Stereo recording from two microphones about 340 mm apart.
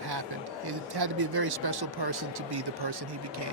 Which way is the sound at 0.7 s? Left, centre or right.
Right.